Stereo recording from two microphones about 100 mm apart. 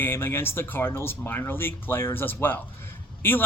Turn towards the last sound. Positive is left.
turn(degrees=20)  # may be behind; listen again after turning